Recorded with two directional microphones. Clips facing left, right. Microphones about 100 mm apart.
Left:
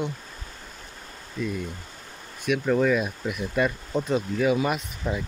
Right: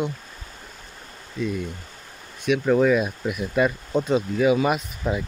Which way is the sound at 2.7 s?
10° right (ahead or behind).